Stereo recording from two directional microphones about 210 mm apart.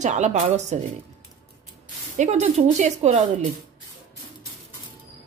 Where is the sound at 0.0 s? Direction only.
35° right (ahead or behind).